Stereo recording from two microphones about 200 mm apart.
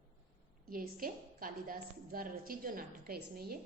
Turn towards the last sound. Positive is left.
turn(degrees=-50)  # may be behind; listen again after turning